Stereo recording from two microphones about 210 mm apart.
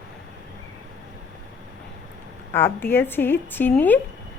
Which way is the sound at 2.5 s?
10° left (ahead or behind).